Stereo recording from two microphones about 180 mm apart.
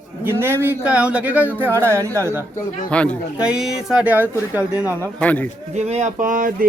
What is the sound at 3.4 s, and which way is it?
Speech, 5° right (ahead or behind).